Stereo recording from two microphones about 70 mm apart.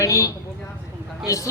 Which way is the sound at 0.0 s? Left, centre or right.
Left.